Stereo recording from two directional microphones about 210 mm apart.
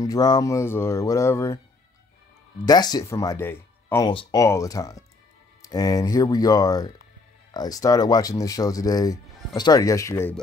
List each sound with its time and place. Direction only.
0.0 s speech: 20° left (ahead or behind)
2.6 s speech: 20° left (ahead or behind)
4.1 s speech: 20° left (ahead or behind)